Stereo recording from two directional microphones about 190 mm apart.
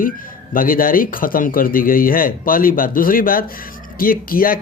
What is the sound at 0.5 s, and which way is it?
Speech, 50° left (ahead or behind).